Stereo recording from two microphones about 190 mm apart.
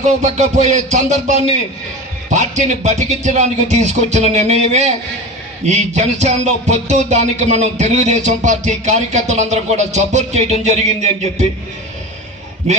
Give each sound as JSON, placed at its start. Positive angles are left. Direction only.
{"t": 0.0, "sound": "music", "side_deg": -35}
{"t": 2.3, "sound": "music", "side_deg": -40}
{"t": 12.7, "sound": "music", "side_deg": -35}